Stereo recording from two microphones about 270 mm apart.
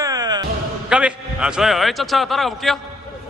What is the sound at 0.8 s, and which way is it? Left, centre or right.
A man's voice, centre.